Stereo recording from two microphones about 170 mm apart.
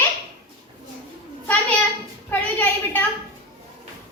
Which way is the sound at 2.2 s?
10° left (ahead or behind).